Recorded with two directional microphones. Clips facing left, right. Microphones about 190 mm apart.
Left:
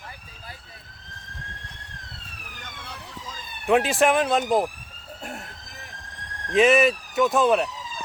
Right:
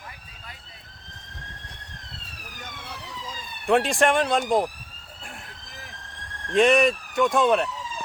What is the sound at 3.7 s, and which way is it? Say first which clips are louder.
Speech: left 1 dB; 5° left (ahead or behind).